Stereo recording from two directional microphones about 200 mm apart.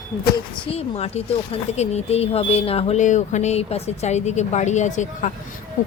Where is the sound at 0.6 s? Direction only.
30° left (ahead or behind).